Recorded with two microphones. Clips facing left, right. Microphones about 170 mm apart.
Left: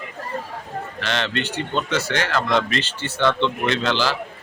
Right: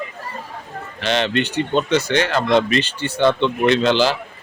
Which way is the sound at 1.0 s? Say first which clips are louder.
Right 6 dB; 20° right (ahead or behind).